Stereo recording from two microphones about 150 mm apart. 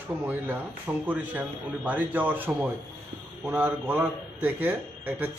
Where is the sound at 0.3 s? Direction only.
15° right (ahead or behind).